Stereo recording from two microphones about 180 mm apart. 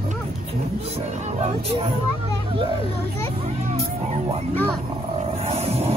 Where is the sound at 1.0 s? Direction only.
35° right (ahead or behind).